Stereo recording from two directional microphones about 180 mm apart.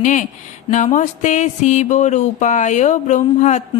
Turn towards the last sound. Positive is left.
turn(degrees=40)  # may be behind; listen again after turning